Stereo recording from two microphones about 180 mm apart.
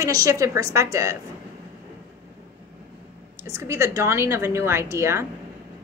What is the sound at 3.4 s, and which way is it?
A woman's voice, 15° right (ahead or behind).